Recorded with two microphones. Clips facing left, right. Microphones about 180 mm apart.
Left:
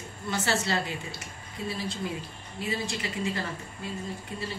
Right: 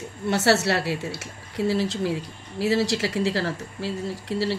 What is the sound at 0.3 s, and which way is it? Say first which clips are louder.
A woman's voice: right 8 dB; 70° right (ahead or behind).